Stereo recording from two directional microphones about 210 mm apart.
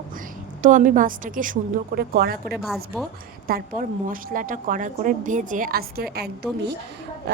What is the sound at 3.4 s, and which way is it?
A woman's voice, 40° right (ahead or behind).